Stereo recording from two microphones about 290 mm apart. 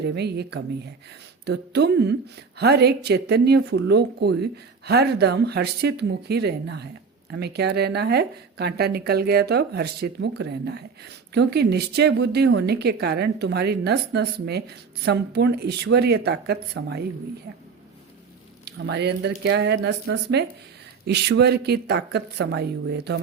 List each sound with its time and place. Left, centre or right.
0.0 s speech: right
18.6 s speech: right